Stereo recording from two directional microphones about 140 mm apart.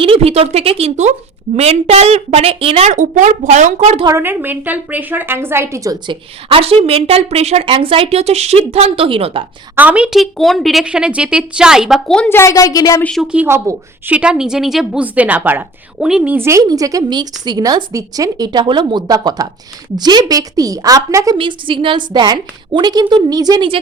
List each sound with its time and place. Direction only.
0.0 s a woman's voice: 45° right (ahead or behind)
2.9 s a woman's voice: 65° right (ahead or behind)
4.0 s a woman's voice: 15° right (ahead or behind)
6.5 s a woman's voice: 45° right (ahead or behind)
9.7 s a woman's voice: 10° right (ahead or behind); by 13.0 s 25° left (ahead or behind)
13.0 s a woman's voice: 5° left (ahead or behind)
13.2 s a woman's voice: 10° right (ahead or behind)
21.3 s a woman's voice: 40° right (ahead or behind)